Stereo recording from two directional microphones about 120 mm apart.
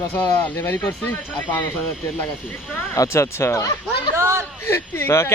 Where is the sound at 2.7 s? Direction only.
25° left (ahead or behind).